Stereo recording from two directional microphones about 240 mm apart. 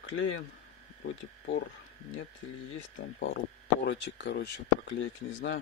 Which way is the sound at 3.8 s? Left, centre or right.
Left.